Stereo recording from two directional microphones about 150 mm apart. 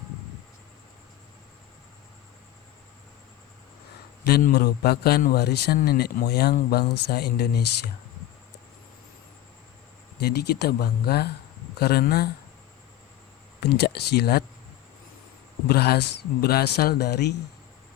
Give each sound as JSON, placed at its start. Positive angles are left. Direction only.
{"t": 4.3, "sound": "a man's voice", "side_deg": 90}
{"t": 10.2, "sound": "a man's voice", "side_deg": 90}
{"t": 13.6, "sound": "a man's voice", "side_deg": 90}
{"t": 15.6, "sound": "a man's voice", "side_deg": 90}